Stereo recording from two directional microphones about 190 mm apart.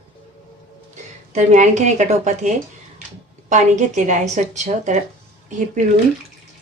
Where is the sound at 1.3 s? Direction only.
40° right (ahead or behind).